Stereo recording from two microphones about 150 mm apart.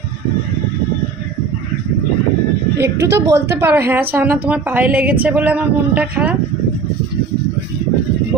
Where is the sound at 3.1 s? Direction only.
20° right (ahead or behind).